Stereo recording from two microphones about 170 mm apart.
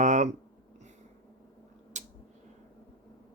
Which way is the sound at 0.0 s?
45° right (ahead or behind).